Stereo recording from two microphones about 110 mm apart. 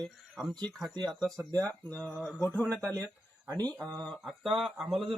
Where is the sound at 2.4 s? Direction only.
15° left (ahead or behind).